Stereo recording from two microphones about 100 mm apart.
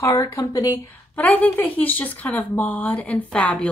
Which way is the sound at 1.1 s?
15° left (ahead or behind).